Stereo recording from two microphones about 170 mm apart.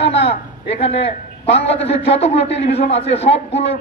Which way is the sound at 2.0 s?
35° left (ahead or behind).